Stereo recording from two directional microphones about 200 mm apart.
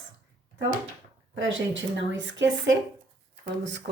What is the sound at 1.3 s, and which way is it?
A woman's voice, 70° right (ahead or behind).